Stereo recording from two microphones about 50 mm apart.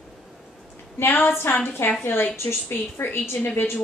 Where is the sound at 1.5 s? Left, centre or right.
Left.